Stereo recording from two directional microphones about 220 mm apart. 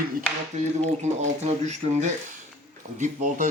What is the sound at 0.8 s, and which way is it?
Speech, 30° right (ahead or behind).